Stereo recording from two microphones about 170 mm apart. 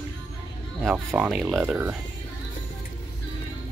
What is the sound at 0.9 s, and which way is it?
Speech, 5° right (ahead or behind).